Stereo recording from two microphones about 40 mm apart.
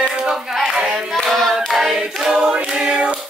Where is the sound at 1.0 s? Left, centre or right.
Centre.